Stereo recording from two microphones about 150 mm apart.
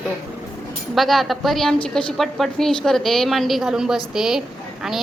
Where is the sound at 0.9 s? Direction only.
Centre (ahead or behind).